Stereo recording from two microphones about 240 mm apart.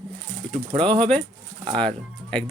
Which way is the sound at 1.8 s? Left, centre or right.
Centre.